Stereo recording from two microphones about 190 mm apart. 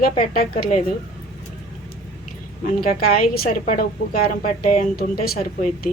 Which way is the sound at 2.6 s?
50° left (ahead or behind).